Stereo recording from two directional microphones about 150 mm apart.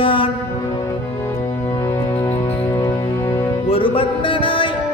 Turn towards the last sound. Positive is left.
turn(degrees=35)  # may be behind; listen again after turning